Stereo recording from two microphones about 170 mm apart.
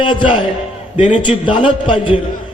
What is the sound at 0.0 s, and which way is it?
A man's voice, 30° left (ahead or behind).